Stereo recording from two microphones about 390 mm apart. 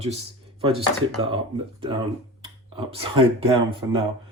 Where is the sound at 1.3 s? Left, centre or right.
Centre.